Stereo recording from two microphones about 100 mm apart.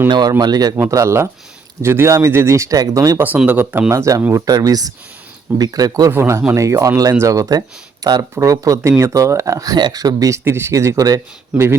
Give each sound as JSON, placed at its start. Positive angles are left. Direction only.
{"t": 0.1, "sound": "speech", "side_deg": -45}
{"t": 0.8, "sound": "speech", "side_deg": -30}
{"t": 3.2, "sound": "speech", "side_deg": -15}
{"t": 3.9, "sound": "speech", "side_deg": -35}
{"t": 6.1, "sound": "speech", "side_deg": -25}
{"t": 9.7, "sound": "speech", "side_deg": -45}